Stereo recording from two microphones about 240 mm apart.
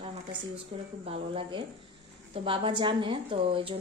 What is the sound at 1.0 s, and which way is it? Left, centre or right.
A woman's voice, right.